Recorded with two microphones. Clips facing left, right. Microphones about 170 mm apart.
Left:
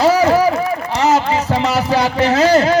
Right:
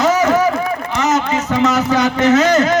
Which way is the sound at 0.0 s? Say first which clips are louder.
Left 1 dB; 30° left (ahead or behind).